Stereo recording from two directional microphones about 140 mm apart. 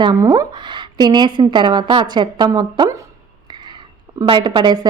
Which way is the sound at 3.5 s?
30° right (ahead or behind).